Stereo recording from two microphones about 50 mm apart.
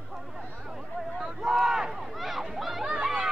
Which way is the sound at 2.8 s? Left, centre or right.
Centre.